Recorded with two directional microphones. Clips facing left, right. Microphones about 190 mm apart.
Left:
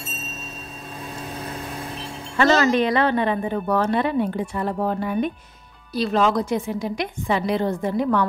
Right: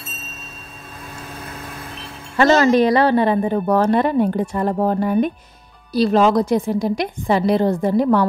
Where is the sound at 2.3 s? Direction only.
35° right (ahead or behind).